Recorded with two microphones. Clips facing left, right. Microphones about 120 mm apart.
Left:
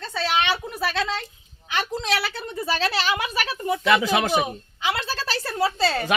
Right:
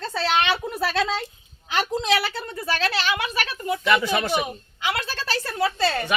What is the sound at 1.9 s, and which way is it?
Speech, 20° right (ahead or behind).